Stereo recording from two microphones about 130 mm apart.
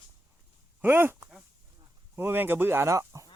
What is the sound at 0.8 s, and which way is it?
A man's voice, 15° right (ahead or behind).